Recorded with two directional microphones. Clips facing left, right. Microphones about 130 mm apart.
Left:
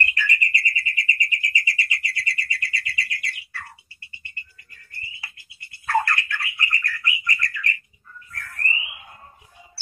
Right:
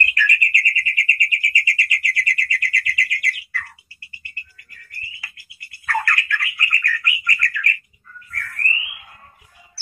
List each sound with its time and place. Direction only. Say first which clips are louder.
0.0 s bird: right 3 dB; 25° left (ahead or behind)
8.3 s alarm: right 2 dB; 20° left (ahead or behind)